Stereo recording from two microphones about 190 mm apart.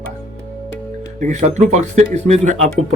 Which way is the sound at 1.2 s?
35° right (ahead or behind).